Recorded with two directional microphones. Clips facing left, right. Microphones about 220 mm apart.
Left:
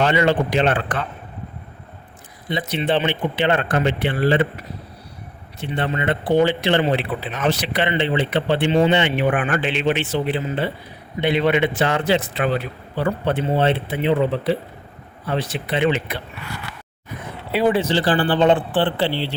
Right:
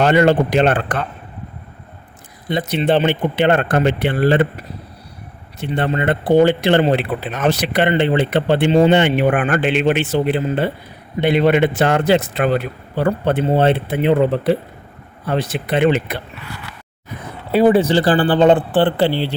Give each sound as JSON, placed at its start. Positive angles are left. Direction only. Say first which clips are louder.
{"t": 0.0, "sound": "speech", "louder": "right 5 dB", "side_deg": -50}
{"t": 2.5, "sound": "speech", "louder": "right 4 dB", "side_deg": -45}
{"t": 5.5, "sound": "speech", "louder": "right 4 dB", "side_deg": -45}
{"t": 17.5, "sound": "speech", "louder": "right 6 dB", "side_deg": -50}